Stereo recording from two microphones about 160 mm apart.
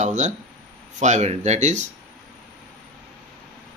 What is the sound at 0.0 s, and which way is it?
Speech, 50° right (ahead or behind).